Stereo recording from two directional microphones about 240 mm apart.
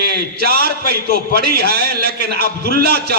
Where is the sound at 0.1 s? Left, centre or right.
Right.